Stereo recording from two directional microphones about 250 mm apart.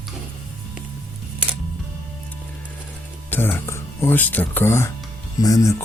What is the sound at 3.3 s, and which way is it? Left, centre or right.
Speech, centre.